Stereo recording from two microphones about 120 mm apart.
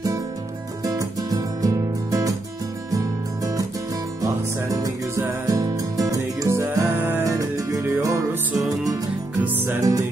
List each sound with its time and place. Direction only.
0.8 s music: 30° right (ahead or behind)
4.2 s music: 30° right (ahead or behind)
9.4 s music: 15° right (ahead or behind)
9.8 s music: 25° right (ahead or behind)